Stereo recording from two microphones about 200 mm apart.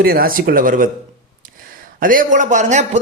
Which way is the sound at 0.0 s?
45° right (ahead or behind).